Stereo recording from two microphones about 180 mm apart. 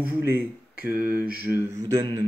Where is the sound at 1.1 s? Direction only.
55° right (ahead or behind).